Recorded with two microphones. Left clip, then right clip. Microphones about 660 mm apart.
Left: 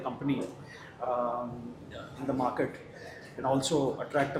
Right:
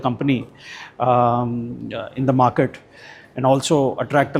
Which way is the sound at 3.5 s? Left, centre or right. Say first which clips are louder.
Right 11 dB; right.